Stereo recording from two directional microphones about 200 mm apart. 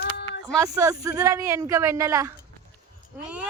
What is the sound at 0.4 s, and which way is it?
Speech, 20° right (ahead or behind).